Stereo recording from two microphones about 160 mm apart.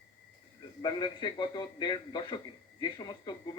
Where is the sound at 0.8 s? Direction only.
30° left (ahead or behind).